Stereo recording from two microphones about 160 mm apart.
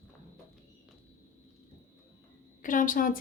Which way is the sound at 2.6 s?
55° left (ahead or behind).